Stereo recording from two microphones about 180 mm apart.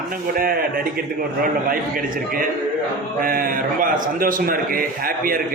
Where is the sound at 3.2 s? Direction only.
50° right (ahead or behind).